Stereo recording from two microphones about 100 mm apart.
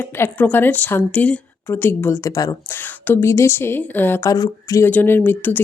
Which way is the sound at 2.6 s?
20° left (ahead or behind).